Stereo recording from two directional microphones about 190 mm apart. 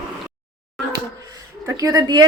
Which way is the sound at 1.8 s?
20° right (ahead or behind).